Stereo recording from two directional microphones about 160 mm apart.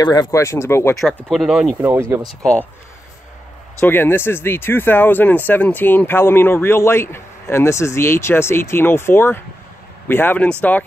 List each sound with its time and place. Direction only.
0.0 s speech: 25° left (ahead or behind)
1.0 s speech: centre (ahead or behind)
1.9 s speech: 15° right (ahead or behind)
3.8 s speech: 15° left (ahead or behind)